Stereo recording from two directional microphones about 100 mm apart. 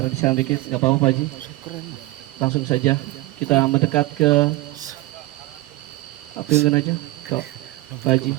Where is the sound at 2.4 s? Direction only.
35° left (ahead or behind).